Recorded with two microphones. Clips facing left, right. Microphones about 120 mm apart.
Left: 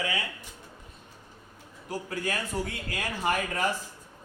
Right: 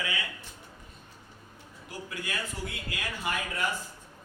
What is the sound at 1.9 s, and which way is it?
A man's voice, 40° left (ahead or behind).